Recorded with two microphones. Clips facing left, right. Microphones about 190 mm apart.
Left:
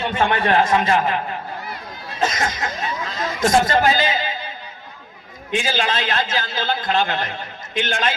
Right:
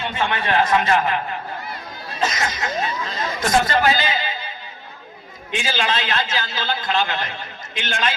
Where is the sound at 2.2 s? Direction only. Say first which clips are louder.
Left 2 dB; 50° left (ahead or behind).